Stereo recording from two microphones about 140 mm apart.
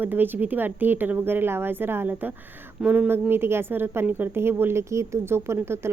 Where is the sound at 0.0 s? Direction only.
15° right (ahead or behind).